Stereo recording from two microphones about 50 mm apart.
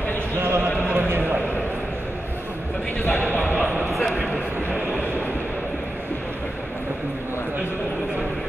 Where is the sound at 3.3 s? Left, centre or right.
Left.